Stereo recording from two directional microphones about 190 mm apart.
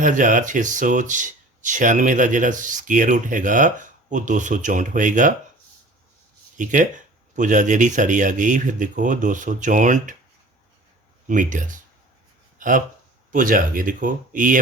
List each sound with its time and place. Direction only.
0.0 s speech: 45° right (ahead or behind)
6.6 s speech: 40° right (ahead or behind)
11.3 s speech: 40° right (ahead or behind)
12.5 s a sound: 45° right (ahead or behind)
13.3 s speech: 45° right (ahead or behind)